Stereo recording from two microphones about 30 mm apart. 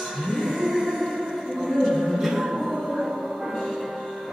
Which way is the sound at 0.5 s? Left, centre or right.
Centre.